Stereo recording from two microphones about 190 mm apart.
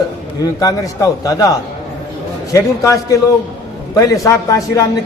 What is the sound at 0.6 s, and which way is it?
A man's voice, 15° left (ahead or behind).